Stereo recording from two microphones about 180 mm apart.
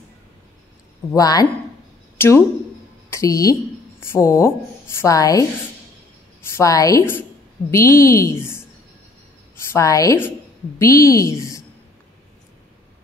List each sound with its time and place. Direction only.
1.1 s a woman's voice: 20° left (ahead or behind)
6.5 s a woman's voice: 20° left (ahead or behind)
9.7 s a woman's voice: 15° left (ahead or behind)